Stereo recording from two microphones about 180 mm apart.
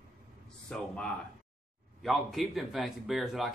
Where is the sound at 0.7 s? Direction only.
5° left (ahead or behind).